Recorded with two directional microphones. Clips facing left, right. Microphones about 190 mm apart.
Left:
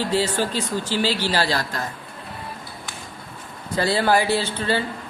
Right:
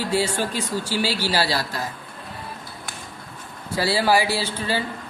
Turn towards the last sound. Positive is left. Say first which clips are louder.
# left 3 dB
turn(degrees=-10)  # may be behind; listen again after turning